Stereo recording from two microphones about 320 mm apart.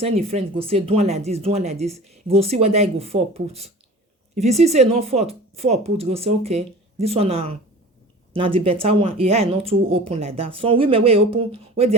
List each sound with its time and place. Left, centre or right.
0.0 s speech: centre